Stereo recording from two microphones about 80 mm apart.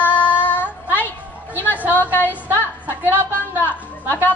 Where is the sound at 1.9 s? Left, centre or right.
Left.